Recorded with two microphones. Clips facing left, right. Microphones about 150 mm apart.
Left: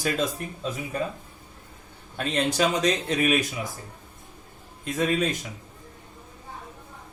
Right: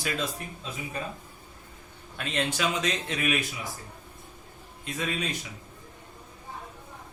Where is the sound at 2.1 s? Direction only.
35° left (ahead or behind).